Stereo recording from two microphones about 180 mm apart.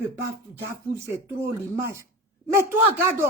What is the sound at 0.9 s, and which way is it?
Speech, 15° right (ahead or behind).